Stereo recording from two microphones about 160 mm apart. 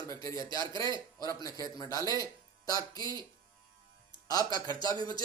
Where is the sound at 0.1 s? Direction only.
20° left (ahead or behind).